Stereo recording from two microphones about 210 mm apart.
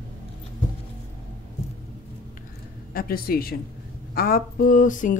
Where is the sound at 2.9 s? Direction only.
45° left (ahead or behind).